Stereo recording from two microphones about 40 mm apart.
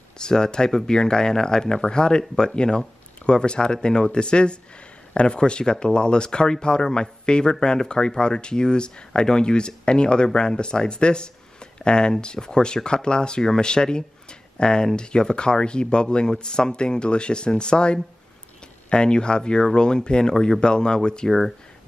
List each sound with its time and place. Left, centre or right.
0.2 s speech: centre
21.3 s speech: centre